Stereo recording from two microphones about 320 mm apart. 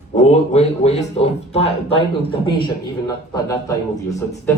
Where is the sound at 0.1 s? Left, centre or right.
Left.